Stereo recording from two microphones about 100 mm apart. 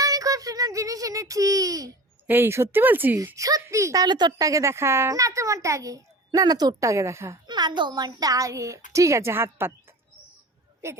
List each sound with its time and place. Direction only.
0.0 s a child's voice: 35° right (ahead or behind)
2.2 s speech: 20° right (ahead or behind)
3.3 s a child's voice: 35° right (ahead or behind)
4.0 s a woman's voice: 45° right (ahead or behind)
4.3 s a child's voice: 35° right (ahead or behind)
7.4 s a child's voice: 45° right (ahead or behind); by 9.7 s 25° right (ahead or behind)
10.8 s speech: 25° right (ahead or behind)